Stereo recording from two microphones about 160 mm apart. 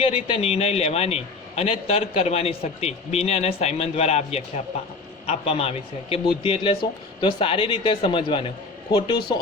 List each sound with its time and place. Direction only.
0.0 s a man's voice: 40° left (ahead or behind)